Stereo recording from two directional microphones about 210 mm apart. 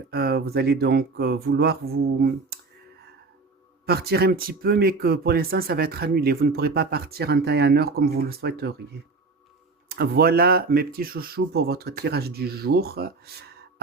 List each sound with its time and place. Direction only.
0.1 s speech: 50° right (ahead or behind)
3.8 s speech: 50° right (ahead or behind)
9.9 s speech: 45° right (ahead or behind)